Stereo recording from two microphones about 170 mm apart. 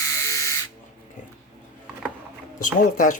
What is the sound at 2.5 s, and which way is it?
Speech, 50° left (ahead or behind).